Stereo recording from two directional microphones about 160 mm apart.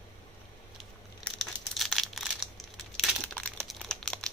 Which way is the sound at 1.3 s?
Centre (ahead or behind).